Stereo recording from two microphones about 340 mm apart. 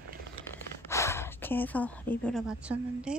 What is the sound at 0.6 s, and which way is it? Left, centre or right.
Speech, centre.